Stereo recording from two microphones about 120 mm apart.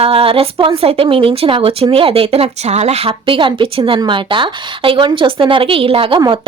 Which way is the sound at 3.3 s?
45° right (ahead or behind).